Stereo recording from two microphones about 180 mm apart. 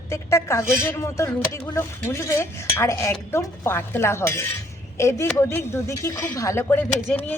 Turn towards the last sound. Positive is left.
turn(degrees=10)  # may be behind; listen again after turning